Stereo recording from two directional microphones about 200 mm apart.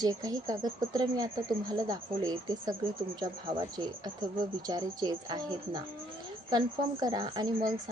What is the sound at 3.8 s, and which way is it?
Speech, 25° right (ahead or behind).